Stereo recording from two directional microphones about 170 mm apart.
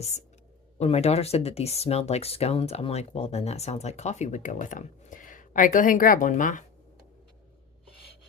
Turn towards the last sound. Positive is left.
turn(degrees=50)  # may be behind; listen again after turning